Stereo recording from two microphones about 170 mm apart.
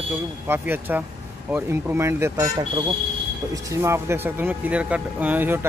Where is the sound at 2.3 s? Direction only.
25° right (ahead or behind).